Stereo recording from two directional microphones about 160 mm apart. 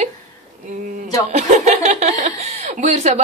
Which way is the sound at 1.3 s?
45° right (ahead or behind).